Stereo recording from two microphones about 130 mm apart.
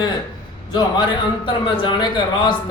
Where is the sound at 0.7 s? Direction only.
35° left (ahead or behind).